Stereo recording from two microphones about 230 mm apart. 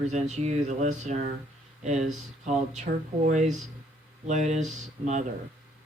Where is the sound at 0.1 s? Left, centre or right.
Right.